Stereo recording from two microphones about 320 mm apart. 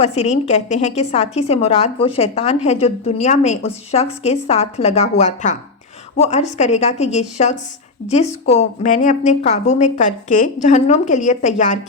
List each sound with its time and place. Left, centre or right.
0.0 s a woman's voice: centre